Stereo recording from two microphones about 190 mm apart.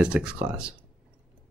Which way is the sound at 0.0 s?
5° right (ahead or behind).